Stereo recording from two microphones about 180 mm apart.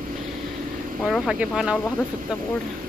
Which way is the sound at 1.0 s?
Centre (ahead or behind).